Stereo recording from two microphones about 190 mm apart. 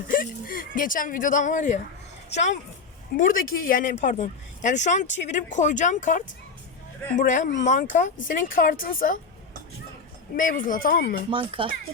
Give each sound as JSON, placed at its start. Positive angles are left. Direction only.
{"t": 0.1, "sound": "speech", "side_deg": 50}
{"t": 10.3, "sound": "speech", "side_deg": 45}
{"t": 11.3, "sound": "speech", "side_deg": -25}